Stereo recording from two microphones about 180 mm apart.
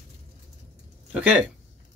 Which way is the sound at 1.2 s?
5° right (ahead or behind).